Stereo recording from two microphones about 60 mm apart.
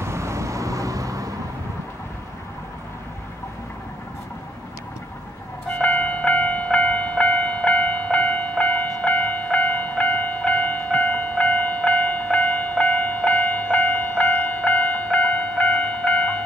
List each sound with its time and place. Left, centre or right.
0.0 s vehicle: right
5.7 s music: left